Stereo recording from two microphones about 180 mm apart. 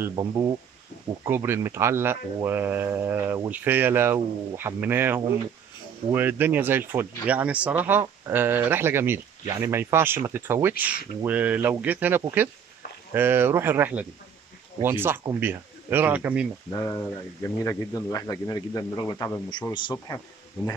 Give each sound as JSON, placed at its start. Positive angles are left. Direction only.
{"t": 0.1, "sound": "speech", "side_deg": -20}
{"t": 16.7, "sound": "speech", "side_deg": 20}